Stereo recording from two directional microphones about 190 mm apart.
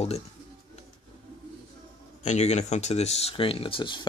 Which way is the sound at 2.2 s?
35° left (ahead or behind).